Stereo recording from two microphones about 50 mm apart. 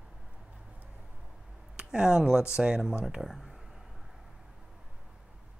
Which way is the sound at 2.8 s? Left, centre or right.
Centre.